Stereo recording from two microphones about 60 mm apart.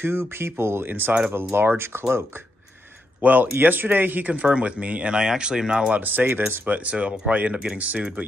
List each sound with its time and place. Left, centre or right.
0.0 s speech: right
3.2 s speech: right
4.3 s speech: centre
5.9 s speech: right